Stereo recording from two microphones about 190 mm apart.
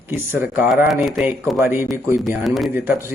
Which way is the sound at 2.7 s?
10° right (ahead or behind).